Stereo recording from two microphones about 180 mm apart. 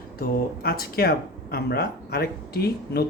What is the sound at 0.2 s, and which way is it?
Speech, 55° left (ahead or behind).